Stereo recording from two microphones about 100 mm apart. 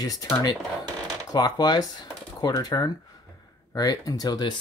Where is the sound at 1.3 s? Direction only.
45° left (ahead or behind).